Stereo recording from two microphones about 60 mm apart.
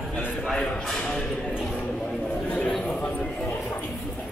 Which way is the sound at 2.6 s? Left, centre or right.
Centre.